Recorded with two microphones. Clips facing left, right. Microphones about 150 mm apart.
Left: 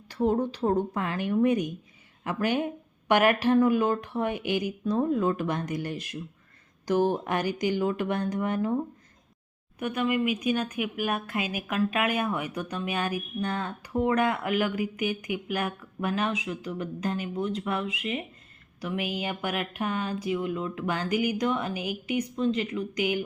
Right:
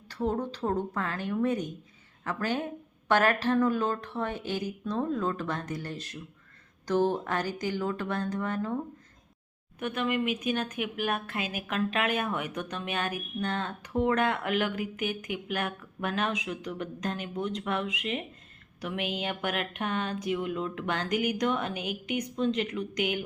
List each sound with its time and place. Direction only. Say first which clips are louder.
0.1 s a woman's voice: left 5 dB; 15° left (ahead or behind)
9.8 s a woman's voice: left 3 dB; 10° left (ahead or behind)